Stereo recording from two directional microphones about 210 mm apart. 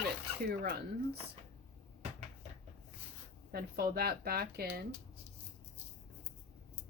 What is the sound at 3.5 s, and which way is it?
Speech, 45° right (ahead or behind).